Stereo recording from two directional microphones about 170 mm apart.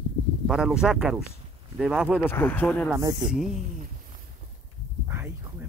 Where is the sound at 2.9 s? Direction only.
20° right (ahead or behind).